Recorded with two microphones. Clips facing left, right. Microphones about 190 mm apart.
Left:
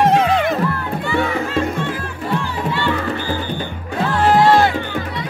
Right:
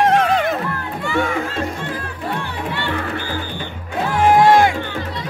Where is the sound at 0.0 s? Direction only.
5° left (ahead or behind).